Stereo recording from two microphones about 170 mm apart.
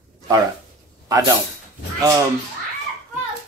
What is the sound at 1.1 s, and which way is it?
Speech, 20° right (ahead or behind).